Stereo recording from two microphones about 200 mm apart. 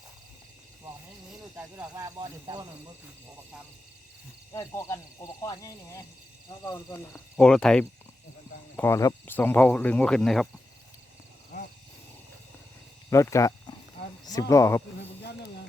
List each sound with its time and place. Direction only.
1.5 s speech: 15° right (ahead or behind)
4.5 s speech: 15° left (ahead or behind)
7.3 s speech: 5° left (ahead or behind)
13.1 s speech: 15° left (ahead or behind)